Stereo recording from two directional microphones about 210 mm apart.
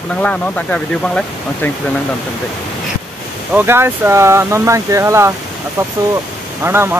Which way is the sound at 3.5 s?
10° right (ahead or behind).